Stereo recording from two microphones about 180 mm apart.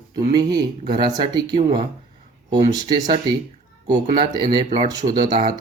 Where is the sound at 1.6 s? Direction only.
40° right (ahead or behind).